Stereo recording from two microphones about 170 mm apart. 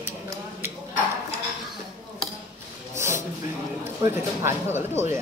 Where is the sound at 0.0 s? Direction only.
15° right (ahead or behind).